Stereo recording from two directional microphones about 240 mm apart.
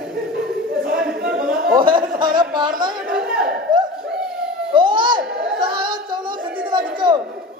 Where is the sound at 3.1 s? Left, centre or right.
Centre.